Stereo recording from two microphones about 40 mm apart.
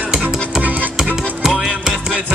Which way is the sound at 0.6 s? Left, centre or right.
Right.